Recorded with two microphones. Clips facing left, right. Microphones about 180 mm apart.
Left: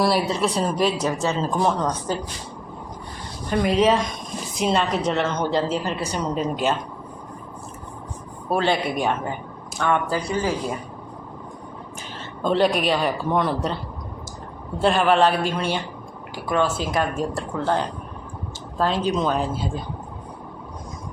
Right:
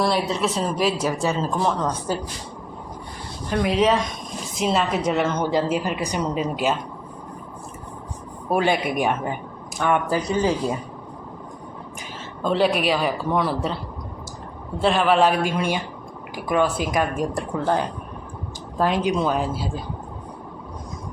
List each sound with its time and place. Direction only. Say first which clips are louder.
0.0 s a man's voice: left 1 dB; centre (ahead or behind)
3.5 s a man's voice: left 1 dB; centre (ahead or behind)
8.4 s a woman's voice: right 1 dB; 15° right (ahead or behind)
12.4 s a man's voice: even; 5° right (ahead or behind)
14.8 s a woman's voice: even; centre (ahead or behind)